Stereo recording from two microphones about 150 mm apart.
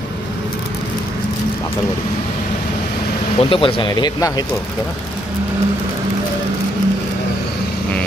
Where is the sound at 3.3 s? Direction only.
35° left (ahead or behind).